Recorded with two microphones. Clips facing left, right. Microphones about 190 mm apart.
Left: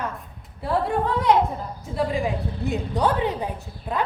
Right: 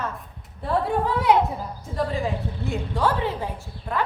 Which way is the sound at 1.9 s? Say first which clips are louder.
Left 2 dB; 15° left (ahead or behind).